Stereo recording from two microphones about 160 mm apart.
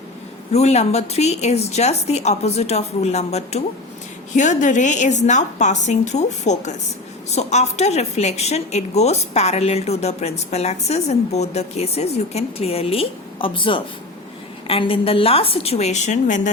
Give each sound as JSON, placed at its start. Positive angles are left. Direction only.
{"t": 0.5, "sound": "a woman's voice", "side_deg": 40}